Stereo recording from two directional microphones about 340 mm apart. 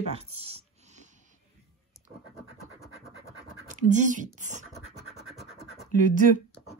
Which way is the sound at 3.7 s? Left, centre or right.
Right.